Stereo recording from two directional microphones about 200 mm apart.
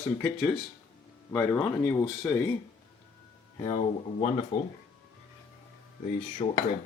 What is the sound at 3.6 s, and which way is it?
Speech, 20° left (ahead or behind).